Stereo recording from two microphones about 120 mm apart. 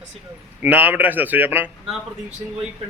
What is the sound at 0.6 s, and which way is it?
A man's voice, 15° right (ahead or behind).